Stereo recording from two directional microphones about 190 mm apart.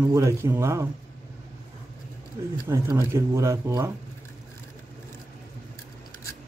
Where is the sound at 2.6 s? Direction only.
15° right (ahead or behind).